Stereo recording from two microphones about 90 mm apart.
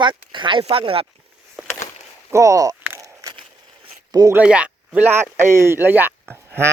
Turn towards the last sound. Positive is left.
turn(degrees=-30)  # may be behind; listen again after turning